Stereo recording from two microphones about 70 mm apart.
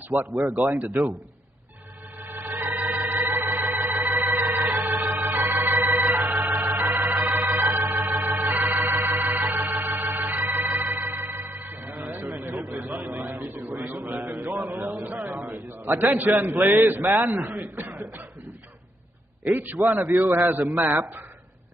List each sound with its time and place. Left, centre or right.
0.1 s a man's voice: right
2.2 s organ: right
12.1 s a sound: right
16.2 s a man's voice: right
17.8 s cough: right
19.5 s a man's voice: right